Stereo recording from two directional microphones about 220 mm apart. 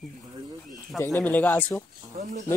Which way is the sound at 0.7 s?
15° left (ahead or behind).